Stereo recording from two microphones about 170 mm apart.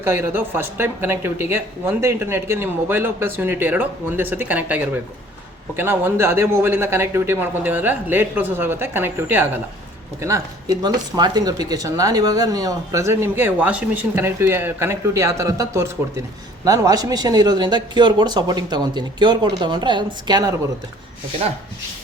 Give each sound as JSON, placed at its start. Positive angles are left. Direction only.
{"t": 0.0, "sound": "speech", "side_deg": -15}